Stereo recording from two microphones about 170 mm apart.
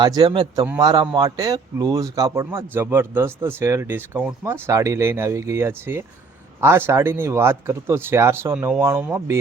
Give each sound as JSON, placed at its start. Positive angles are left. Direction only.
{"t": 0.0, "sound": "a man's voice", "side_deg": -25}